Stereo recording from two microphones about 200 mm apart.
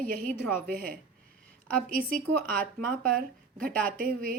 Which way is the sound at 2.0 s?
45° right (ahead or behind).